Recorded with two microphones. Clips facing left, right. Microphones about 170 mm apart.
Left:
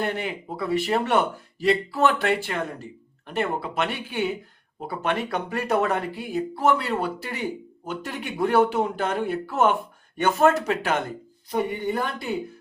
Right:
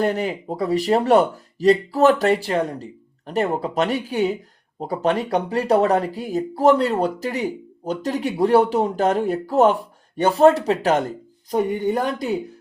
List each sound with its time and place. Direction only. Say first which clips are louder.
0.0 s speech: right 6 dB; 40° right (ahead or behind)